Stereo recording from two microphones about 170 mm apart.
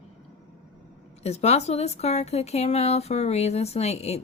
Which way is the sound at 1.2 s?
40° left (ahead or behind).